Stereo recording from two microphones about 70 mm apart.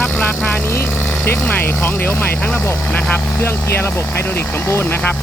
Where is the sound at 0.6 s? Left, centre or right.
Left.